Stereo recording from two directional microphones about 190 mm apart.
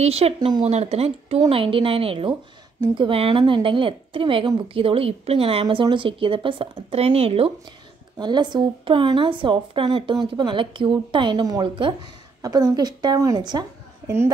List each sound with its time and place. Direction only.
0.0 s speech: 30° right (ahead or behind); by 14.3 s 15° right (ahead or behind)